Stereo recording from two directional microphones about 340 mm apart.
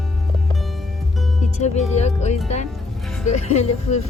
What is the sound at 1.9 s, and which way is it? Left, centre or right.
Speech, centre.